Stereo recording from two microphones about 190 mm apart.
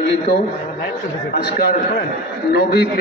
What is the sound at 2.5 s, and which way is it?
Speech, 55° left (ahead or behind).